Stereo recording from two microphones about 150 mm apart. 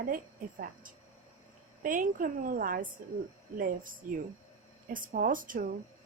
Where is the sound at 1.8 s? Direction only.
65° right (ahead or behind).